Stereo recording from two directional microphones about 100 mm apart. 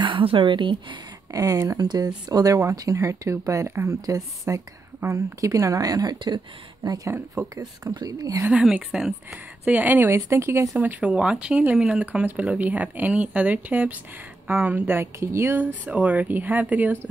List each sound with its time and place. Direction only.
0.0 s a woman's voice: 60° right (ahead or behind)
1.3 s speech: 35° right (ahead or behind)
7.1 s speech: 30° right (ahead or behind)
7.8 s speech: 40° right (ahead or behind)
8.4 s a woman's voice: 15° right (ahead or behind)
9.7 s speech: 15° right (ahead or behind)
10.8 s speech: 15° right (ahead or behind)